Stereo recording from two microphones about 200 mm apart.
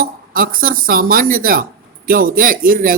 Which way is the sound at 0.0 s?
45° right (ahead or behind).